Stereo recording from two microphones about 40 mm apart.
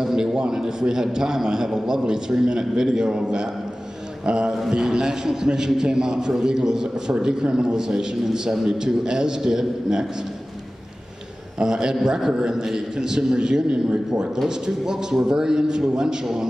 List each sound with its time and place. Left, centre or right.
0.0 s a man's voice: centre
4.5 s a man's voice: centre
11.6 s a man's voice: centre
14.9 s a man's voice: centre